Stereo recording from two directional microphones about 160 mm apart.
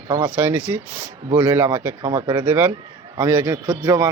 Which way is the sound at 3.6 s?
25° right (ahead or behind).